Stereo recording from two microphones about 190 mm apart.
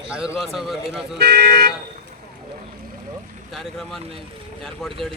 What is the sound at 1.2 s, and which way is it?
Speech, 60° right (ahead or behind).